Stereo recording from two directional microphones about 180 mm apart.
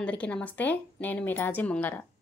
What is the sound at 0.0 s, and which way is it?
A woman's voice, 5° left (ahead or behind).